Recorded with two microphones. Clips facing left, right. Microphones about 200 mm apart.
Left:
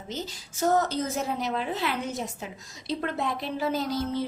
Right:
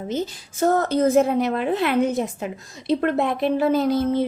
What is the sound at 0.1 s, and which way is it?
A woman's voice, 55° right (ahead or behind).